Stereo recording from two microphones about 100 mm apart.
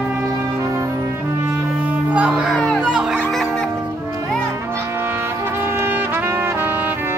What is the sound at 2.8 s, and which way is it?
Music, 10° right (ahead or behind).